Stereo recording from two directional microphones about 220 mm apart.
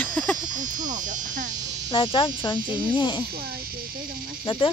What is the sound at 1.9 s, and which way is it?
Speech, 25° left (ahead or behind).